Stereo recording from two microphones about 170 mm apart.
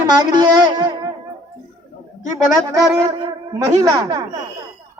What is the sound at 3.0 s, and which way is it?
Speech, 20° right (ahead or behind).